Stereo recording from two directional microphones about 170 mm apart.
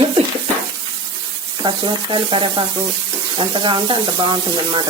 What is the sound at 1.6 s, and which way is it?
Speech, 30° right (ahead or behind).